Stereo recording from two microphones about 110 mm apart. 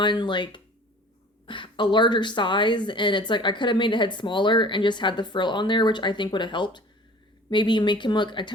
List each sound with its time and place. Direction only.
0.0 s a woman's voice: 45° left (ahead or behind)